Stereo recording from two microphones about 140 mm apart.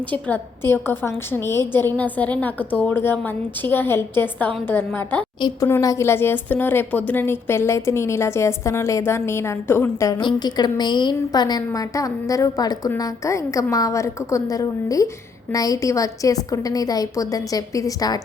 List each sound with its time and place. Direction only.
0.1 s a woman's voice: 10° left (ahead or behind)
10.2 s a woman's voice: 30° left (ahead or behind)